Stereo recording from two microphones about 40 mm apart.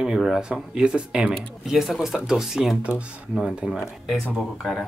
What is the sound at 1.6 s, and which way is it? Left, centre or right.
Speech, centre.